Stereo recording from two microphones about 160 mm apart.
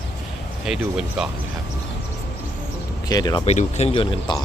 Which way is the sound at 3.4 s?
40° left (ahead or behind).